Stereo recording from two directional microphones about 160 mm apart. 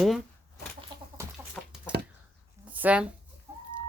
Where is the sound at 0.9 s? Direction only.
30° right (ahead or behind).